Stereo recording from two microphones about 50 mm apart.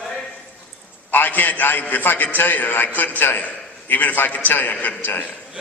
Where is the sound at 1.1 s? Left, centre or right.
Left.